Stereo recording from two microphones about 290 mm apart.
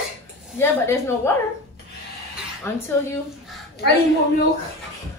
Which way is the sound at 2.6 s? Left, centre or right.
Centre.